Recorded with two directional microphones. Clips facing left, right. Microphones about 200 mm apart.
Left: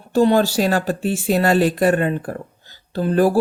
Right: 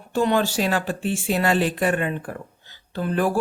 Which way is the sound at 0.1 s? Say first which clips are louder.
Left 6 dB; 35° left (ahead or behind).